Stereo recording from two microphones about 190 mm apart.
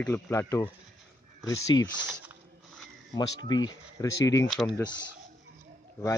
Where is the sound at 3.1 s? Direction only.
20° left (ahead or behind); by 4.7 s 5° left (ahead or behind).